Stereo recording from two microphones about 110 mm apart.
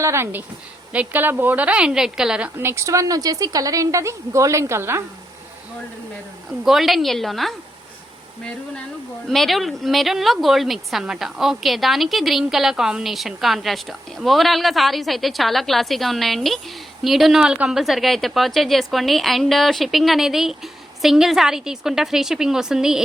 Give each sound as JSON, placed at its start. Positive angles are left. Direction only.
{"t": 0.0, "sound": "a woman's voice", "side_deg": -25}
{"t": 2.6, "sound": "a woman's voice", "side_deg": -25}
{"t": 6.7, "sound": "speech", "side_deg": 0}
{"t": 9.2, "sound": "speech", "side_deg": 0}